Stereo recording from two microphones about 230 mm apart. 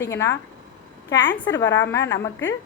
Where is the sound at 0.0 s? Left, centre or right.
Centre.